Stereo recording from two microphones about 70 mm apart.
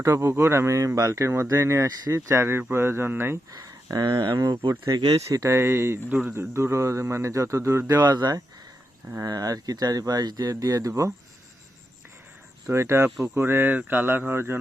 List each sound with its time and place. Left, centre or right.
0.0 s speech: right
3.9 s speech: right
5.3 s speech: right
6.1 s speech: right
6.3 s speech: right
7.9 s speech: right
9.2 s speech: right
12.6 s speech: right